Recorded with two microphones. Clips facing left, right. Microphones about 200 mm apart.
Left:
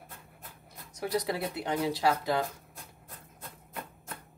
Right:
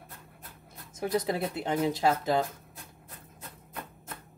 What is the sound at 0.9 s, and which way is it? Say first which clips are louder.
Speech: right 2 dB; 25° right (ahead or behind).